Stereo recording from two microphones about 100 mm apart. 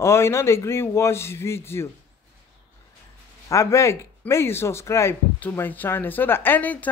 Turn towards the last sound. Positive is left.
turn(degrees=15)  # may be behind; listen again after turning